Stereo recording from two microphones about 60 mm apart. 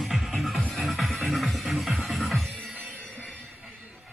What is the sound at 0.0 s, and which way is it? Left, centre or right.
Music, centre.